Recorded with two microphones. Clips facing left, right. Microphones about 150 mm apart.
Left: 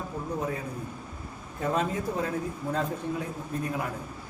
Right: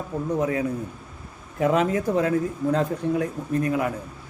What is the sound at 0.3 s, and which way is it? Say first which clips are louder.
A man's voice: right 9 dB; 85° right.